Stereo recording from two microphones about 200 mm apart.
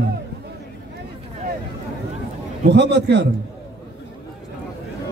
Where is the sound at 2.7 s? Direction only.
60° right (ahead or behind).